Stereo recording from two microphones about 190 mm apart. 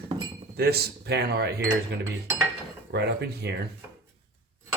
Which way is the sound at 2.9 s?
60° right (ahead or behind).